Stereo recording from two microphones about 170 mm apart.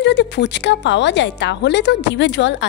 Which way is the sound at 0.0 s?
90° left.